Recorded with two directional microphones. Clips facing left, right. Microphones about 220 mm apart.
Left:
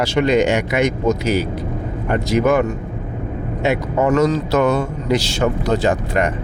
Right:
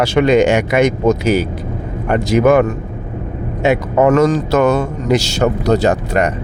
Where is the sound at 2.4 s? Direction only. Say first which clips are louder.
Right 6 dB; 55° right (ahead or behind).